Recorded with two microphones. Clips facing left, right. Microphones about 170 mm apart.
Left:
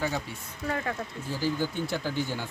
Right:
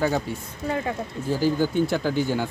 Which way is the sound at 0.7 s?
20° right (ahead or behind).